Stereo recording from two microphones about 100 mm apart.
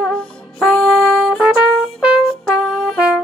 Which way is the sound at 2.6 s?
5° left (ahead or behind).